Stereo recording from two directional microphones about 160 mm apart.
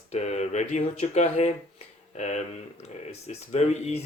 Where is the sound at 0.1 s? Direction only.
45° left (ahead or behind).